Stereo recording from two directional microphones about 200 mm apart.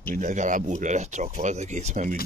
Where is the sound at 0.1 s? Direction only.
40° right (ahead or behind).